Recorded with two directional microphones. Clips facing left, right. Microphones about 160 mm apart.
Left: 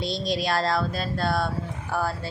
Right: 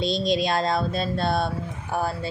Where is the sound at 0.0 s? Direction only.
20° right (ahead or behind).